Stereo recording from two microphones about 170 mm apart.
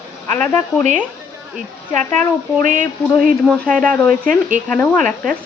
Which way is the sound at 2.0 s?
45° right (ahead or behind).